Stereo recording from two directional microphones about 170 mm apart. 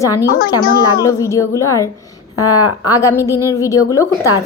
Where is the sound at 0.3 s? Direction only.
60° left (ahead or behind).